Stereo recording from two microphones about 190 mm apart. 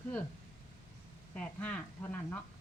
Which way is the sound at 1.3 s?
10° left (ahead or behind).